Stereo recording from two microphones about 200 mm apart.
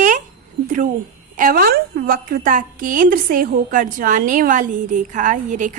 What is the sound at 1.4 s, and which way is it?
A woman's voice, 45° right (ahead or behind).